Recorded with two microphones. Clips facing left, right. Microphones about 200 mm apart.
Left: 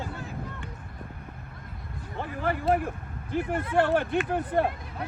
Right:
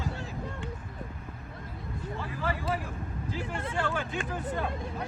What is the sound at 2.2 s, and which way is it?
Speech, 60° left (ahead or behind).